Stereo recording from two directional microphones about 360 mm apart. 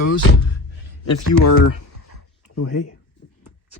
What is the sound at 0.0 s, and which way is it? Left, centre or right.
Speech, left.